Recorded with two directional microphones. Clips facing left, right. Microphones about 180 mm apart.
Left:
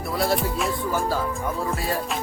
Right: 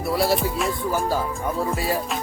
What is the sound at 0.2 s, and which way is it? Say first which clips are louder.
Speech: left 1 dB; centre (ahead or behind).